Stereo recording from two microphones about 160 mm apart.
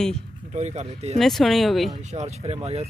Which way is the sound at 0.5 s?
45° right (ahead or behind).